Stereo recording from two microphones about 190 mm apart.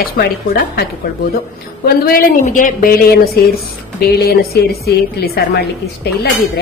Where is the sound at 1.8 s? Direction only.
50° left (ahead or behind).